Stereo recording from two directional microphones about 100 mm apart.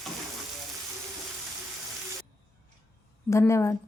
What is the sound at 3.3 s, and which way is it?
Frying, 30° left (ahead or behind).